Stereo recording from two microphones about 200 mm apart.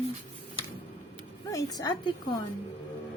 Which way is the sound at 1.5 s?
15° left (ahead or behind).